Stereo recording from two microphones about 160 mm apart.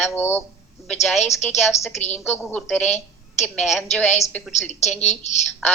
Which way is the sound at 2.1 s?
5° left (ahead or behind).